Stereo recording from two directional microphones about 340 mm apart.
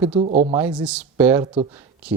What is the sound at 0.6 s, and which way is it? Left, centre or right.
Speech, centre.